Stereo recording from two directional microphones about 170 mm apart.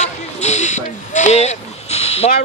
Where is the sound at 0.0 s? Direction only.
40° left (ahead or behind).